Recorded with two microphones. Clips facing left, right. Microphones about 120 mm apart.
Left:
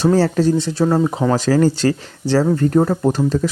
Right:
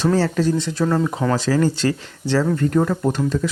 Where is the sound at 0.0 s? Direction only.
35° left (ahead or behind).